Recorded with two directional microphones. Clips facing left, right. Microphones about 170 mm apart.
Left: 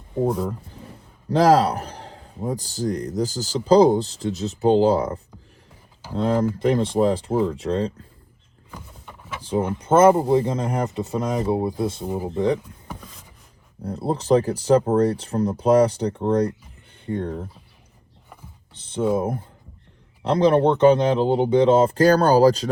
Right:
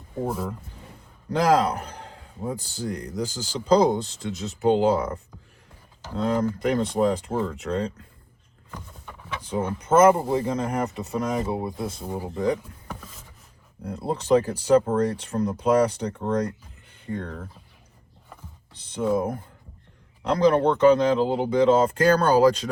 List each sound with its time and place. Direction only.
1.3 s a man's voice: 35° left (ahead or behind)
9.4 s a man's voice: 30° left (ahead or behind)
13.8 s a man's voice: 35° left (ahead or behind)
18.7 s speech: 30° left (ahead or behind)
20.2 s speech: 30° left (ahead or behind)